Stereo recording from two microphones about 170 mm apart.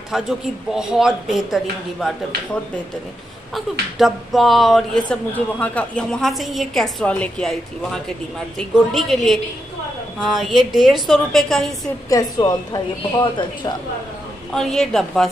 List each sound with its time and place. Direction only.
0.1 s speech: centre (ahead or behind)
4.0 s speech: centre (ahead or behind)
12.1 s a woman's voice: 20° left (ahead or behind)
14.5 s speech: centre (ahead or behind)